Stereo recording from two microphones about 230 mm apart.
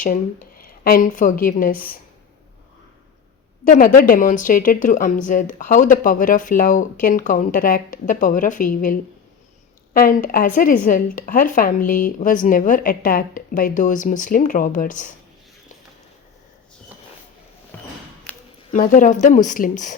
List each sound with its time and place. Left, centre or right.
0.0 s speech: left
3.6 s speech: left
17.7 s a sound: centre
18.7 s speech: left